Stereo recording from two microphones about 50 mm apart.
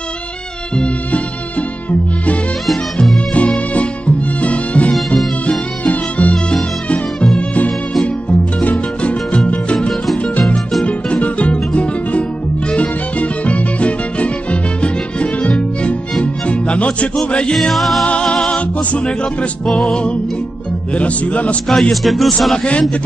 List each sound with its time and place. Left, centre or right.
0.7 s music: left
3.3 s music: left
7.3 s music: left
9.8 s music: centre
10.9 s music: left
17.3 s speech: left
17.6 s a man's voice: centre
18.2 s music: centre
20.9 s speech: left
21.6 s music: centre
22.0 s a man's voice: centre
22.6 s speech: left